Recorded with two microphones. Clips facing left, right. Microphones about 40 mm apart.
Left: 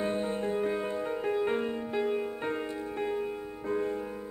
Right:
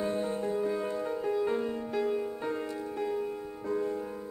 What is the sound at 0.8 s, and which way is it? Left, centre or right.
Music, left.